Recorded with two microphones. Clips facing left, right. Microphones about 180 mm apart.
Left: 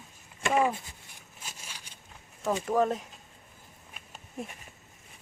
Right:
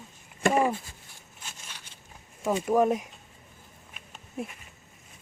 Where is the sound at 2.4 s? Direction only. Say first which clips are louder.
Right 3 dB; 10° right (ahead or behind).